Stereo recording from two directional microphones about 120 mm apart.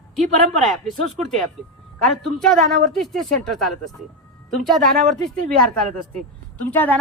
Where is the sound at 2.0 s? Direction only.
Centre (ahead or behind).